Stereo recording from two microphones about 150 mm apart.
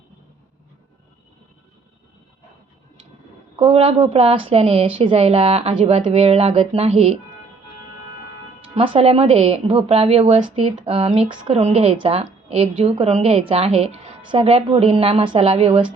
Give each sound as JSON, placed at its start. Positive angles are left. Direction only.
{"t": 3.6, "sound": "a woman's voice", "side_deg": -40}
{"t": 8.7, "sound": "a woman's voice", "side_deg": -40}